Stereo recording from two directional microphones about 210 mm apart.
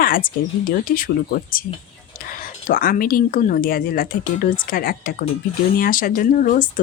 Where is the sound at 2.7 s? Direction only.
45° left (ahead or behind).